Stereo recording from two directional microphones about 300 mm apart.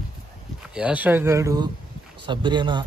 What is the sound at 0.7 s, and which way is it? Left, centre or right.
Speech, centre.